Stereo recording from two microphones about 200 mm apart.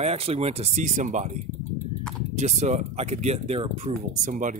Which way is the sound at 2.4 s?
35° right (ahead or behind).